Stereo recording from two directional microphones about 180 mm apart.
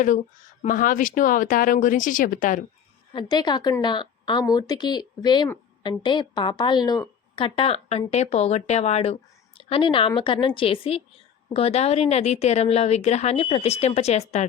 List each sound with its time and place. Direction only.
0.6 s speech: 50° left (ahead or behind)
3.1 s a woman's voice: 25° left (ahead or behind)